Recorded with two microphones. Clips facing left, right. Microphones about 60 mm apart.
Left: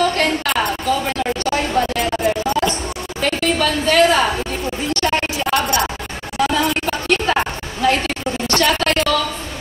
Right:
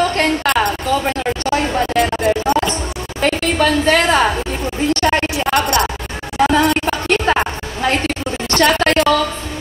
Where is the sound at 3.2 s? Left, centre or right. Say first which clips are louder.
Right 3 dB; right.